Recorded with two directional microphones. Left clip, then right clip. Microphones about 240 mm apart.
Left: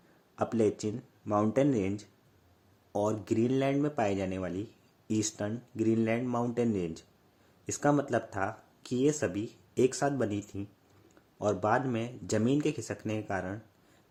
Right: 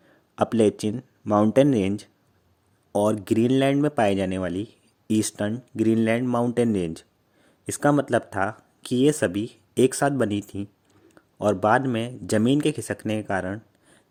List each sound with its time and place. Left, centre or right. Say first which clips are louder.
0.3 s speech: right 8 dB; right